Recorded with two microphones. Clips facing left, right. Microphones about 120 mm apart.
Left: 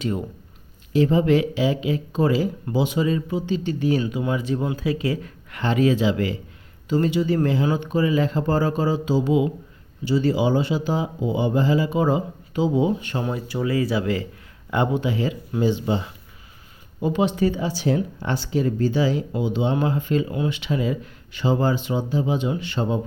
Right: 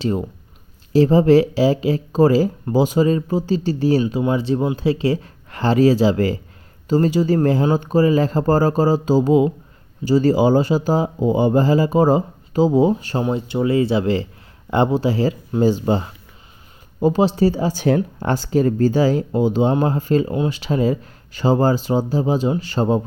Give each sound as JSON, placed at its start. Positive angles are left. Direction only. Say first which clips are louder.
{"t": 0.0, "sound": "speech", "louder": "right 4 dB", "side_deg": -30}